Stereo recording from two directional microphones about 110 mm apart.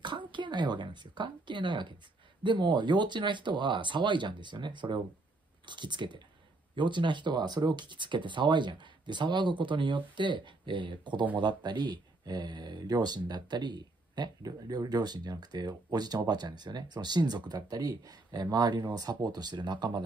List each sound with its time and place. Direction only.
0.3 s speech: 45° right (ahead or behind)